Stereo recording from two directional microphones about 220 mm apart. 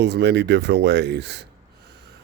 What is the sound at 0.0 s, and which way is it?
Speech, 50° right (ahead or behind).